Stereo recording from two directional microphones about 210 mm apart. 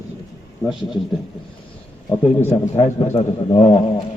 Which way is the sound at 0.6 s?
Centre (ahead or behind).